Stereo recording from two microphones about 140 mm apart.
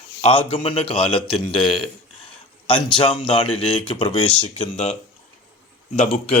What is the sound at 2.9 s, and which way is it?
Speech, 40° left (ahead or behind).